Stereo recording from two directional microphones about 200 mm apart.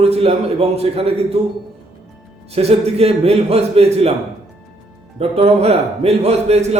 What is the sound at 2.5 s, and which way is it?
A man's voice, 30° right (ahead or behind).